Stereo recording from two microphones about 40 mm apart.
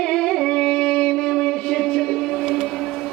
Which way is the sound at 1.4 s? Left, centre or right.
Centre.